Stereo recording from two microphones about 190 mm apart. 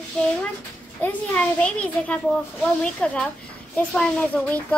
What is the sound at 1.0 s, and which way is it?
A child's voice, 5° left (ahead or behind).